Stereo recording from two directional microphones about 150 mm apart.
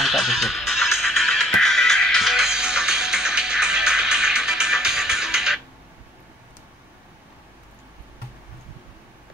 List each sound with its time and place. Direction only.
0.0 s music: centre (ahead or behind)